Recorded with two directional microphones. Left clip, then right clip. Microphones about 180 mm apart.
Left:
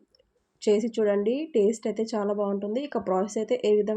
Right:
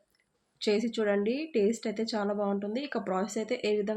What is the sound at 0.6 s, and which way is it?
A woman's voice, 20° left (ahead or behind).